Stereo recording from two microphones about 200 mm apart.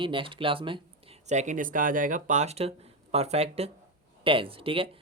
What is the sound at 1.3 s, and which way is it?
Speech, 40° right (ahead or behind).